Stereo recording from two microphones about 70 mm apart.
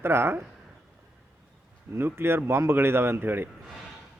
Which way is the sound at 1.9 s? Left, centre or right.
Right.